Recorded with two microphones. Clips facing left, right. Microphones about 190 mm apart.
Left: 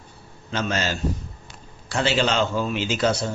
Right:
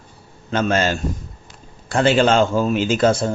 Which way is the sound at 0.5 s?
55° right (ahead or behind).